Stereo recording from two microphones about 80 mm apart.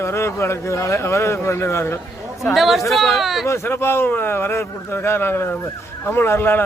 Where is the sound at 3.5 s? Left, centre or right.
Left.